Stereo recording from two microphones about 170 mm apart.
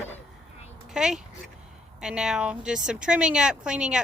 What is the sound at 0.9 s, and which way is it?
A woman's voice, 5° right (ahead or behind).